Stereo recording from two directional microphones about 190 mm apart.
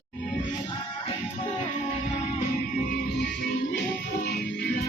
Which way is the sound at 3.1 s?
60° left (ahead or behind).